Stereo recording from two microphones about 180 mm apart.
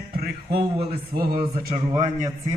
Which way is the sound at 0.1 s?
60° right (ahead or behind).